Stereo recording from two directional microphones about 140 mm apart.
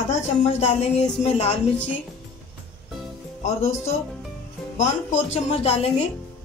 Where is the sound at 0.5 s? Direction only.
55° left (ahead or behind).